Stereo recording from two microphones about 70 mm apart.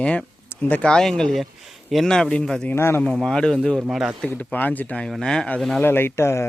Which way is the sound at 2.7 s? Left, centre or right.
Left.